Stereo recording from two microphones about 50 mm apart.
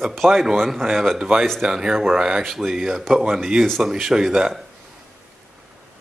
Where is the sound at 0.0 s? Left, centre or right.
Centre.